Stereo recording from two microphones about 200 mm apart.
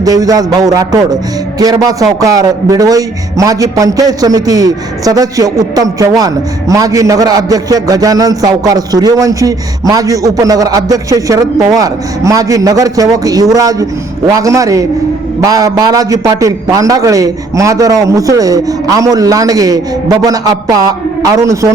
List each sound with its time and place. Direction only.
0.0 s a man's voice: 20° right (ahead or behind)